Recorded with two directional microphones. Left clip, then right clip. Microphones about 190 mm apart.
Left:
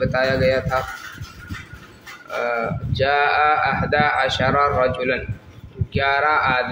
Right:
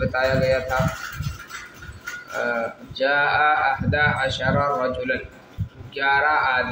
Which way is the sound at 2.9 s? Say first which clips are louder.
Left 2 dB; 60° left (ahead or behind).